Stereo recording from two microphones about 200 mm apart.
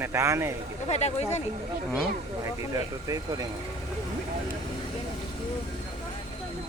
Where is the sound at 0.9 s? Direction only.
35° left (ahead or behind).